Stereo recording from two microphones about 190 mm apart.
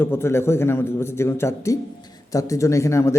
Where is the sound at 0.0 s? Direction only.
15° left (ahead or behind).